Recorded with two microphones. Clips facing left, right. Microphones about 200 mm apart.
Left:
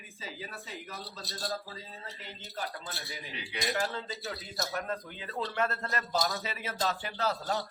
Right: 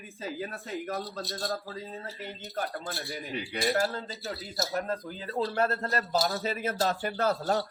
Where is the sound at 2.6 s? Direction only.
50° right (ahead or behind); by 6.4 s 35° right (ahead or behind).